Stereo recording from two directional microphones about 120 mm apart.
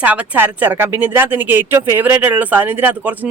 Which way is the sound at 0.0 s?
10° right (ahead or behind).